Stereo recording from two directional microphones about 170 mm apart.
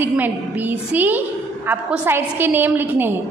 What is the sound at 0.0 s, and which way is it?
A woman's voice, 10° right (ahead or behind).